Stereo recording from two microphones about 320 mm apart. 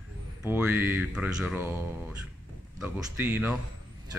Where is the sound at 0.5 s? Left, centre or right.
Centre.